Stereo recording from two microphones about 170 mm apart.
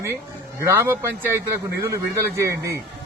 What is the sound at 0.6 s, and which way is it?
A man's voice, 15° right (ahead or behind).